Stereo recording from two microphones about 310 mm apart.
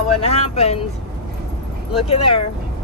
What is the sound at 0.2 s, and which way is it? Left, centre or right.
Speech, centre.